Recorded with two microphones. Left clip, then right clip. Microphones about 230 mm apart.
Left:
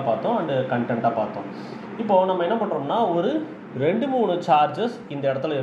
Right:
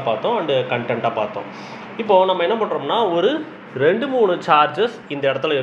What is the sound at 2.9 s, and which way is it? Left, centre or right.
Speech, right.